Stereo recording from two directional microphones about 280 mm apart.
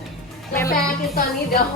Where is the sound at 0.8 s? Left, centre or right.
Left.